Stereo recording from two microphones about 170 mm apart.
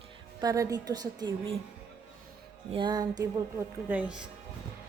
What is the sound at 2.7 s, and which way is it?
A woman's voice, 25° right (ahead or behind).